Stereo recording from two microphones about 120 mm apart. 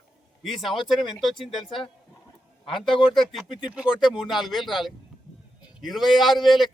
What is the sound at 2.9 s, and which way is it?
Speech, 45° left (ahead or behind).